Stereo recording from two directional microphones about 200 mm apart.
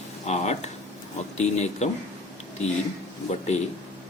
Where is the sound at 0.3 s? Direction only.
35° left (ahead or behind).